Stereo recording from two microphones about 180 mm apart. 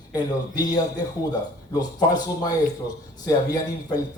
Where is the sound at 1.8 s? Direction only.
20° left (ahead or behind).